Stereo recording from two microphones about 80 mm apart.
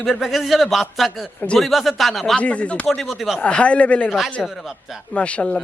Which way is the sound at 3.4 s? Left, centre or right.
Centre.